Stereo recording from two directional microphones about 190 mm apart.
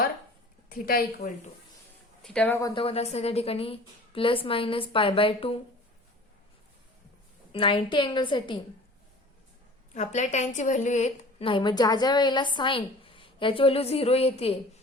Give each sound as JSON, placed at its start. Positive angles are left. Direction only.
{"t": 0.7, "sound": "a woman's voice", "side_deg": 50}
{"t": 2.2, "sound": "speech", "side_deg": 5}
{"t": 2.8, "sound": "a woman's voice", "side_deg": 30}
{"t": 7.5, "sound": "a woman's voice", "side_deg": 30}
{"t": 9.9, "sound": "a woman's voice", "side_deg": 40}